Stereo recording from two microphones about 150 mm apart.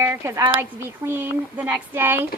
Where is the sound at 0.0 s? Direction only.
20° right (ahead or behind).